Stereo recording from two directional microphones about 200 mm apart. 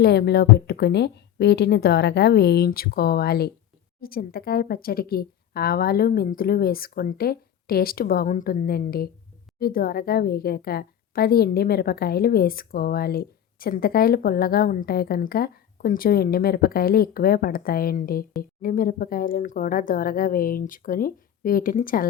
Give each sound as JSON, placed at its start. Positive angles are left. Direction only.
{"t": 0.0, "sound": "a woman's voice", "side_deg": 55}